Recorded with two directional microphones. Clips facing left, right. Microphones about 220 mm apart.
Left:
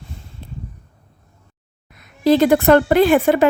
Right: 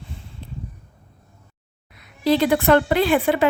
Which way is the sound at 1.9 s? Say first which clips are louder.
Left 4 dB; 45° left (ahead or behind).